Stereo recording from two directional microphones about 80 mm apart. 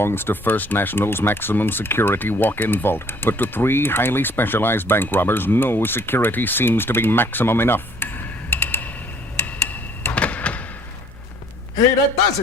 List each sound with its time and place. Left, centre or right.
0.0 s speech: left
9.6 s door: centre